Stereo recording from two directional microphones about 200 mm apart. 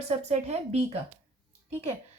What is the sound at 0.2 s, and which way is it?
Speech, 35° right (ahead or behind).